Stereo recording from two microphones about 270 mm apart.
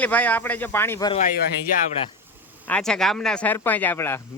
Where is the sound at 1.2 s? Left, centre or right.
Left.